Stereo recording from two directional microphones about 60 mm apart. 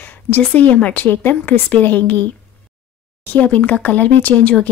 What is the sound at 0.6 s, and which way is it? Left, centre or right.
Speech, left.